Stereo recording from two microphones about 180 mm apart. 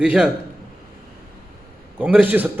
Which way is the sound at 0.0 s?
5° right (ahead or behind).